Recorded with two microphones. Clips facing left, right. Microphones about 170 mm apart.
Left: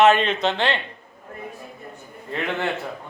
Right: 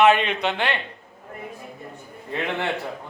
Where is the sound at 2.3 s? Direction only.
15° right (ahead or behind).